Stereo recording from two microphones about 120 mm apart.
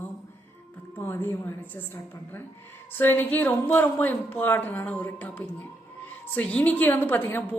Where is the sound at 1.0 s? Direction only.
20° left (ahead or behind).